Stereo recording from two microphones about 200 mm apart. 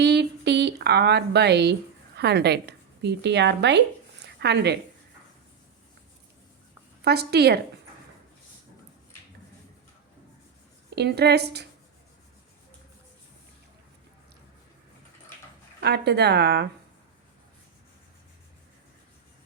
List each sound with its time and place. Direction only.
0.0 s a woman's voice: 55° right (ahead or behind)
7.0 s speech: 55° right (ahead or behind)
10.9 s speech: 55° right (ahead or behind)
15.8 s speech: 55° right (ahead or behind)